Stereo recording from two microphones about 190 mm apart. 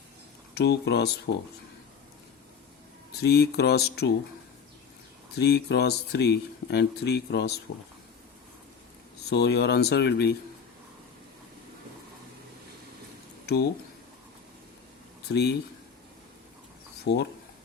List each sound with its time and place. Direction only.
0.5 s speech: 60° left (ahead or behind)
3.1 s speech: 60° left (ahead or behind)
5.4 s speech: 60° left (ahead or behind)
9.3 s speech: 60° left (ahead or behind)
13.4 s a sound: 60° left (ahead or behind)
15.3 s speech: 60° left (ahead or behind)
17.0 s speech: 60° left (ahead or behind)